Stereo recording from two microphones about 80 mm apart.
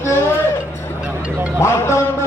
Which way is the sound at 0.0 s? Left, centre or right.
Left.